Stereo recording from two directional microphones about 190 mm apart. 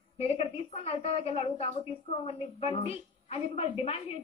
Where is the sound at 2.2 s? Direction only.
30° left (ahead or behind).